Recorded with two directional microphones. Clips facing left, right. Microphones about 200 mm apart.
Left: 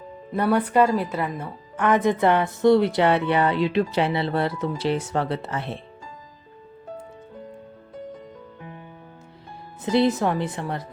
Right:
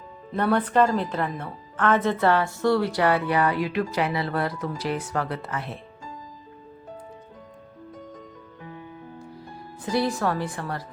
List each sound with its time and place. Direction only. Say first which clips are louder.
0.3 s a woman's voice: left 2 dB; 10° left (ahead or behind); by 5.8 s 30° left (ahead or behind)
9.8 s a woman's voice: left 4 dB; 20° left (ahead or behind)